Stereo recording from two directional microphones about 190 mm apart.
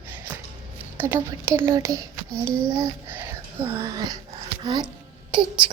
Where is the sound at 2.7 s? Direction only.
15° right (ahead or behind).